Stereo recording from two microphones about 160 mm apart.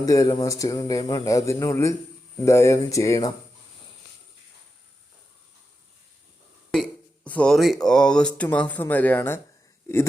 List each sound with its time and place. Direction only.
0.0 s speech: 20° left (ahead or behind)
7.3 s speech: 5° left (ahead or behind)